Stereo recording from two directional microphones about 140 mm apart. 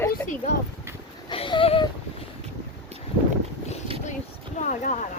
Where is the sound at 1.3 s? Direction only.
40° left (ahead or behind).